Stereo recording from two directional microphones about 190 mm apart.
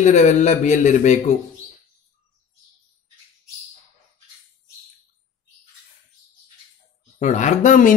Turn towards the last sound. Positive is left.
turn(degrees=45)  # may be behind; listen again after turning